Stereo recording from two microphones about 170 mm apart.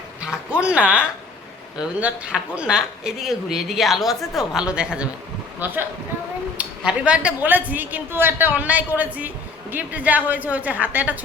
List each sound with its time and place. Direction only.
0.2 s a woman's voice: 5° right (ahead or behind)